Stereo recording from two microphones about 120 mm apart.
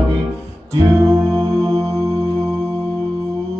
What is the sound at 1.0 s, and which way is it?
Music, 25° right (ahead or behind).